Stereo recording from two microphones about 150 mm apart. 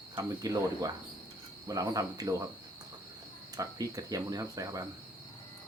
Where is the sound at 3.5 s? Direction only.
20° right (ahead or behind).